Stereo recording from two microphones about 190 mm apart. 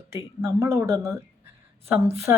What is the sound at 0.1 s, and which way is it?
A woman's voice, 15° right (ahead or behind).